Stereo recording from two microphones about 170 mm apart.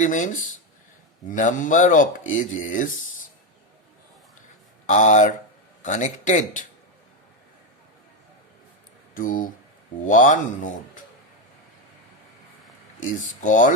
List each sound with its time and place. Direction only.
0.0 s speech: 45° left (ahead or behind)
4.9 s speech: 45° left (ahead or behind)
9.1 s speech: 50° left (ahead or behind)
13.0 s speech: 50° left (ahead or behind)